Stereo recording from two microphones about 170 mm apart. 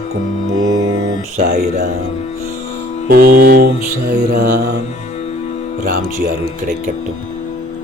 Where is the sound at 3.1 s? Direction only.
60° right (ahead or behind).